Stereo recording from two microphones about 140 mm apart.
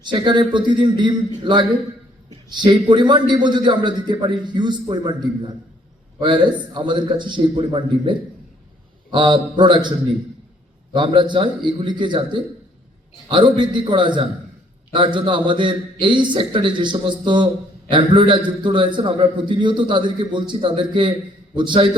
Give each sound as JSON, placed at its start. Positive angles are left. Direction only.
{"t": 0.0, "sound": "a man's voice", "side_deg": -35}
{"t": 10.9, "sound": "a man's voice", "side_deg": -35}